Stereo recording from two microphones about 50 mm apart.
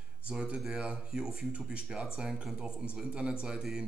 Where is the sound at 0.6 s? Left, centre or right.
Centre.